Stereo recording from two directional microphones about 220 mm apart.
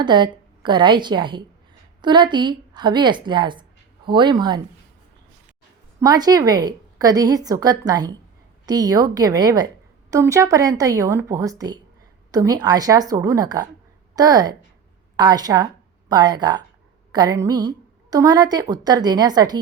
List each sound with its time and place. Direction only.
0.0 s a woman's voice: 20° right (ahead or behind)
6.0 s a woman's voice: 15° right (ahead or behind)